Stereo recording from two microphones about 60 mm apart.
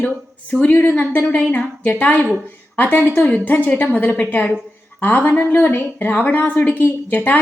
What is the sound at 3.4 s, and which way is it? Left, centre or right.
A woman's voice, left.